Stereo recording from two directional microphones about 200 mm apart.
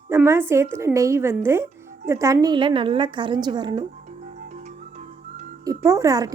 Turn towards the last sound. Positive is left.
turn(degrees=-15)  # may be behind; listen again after turning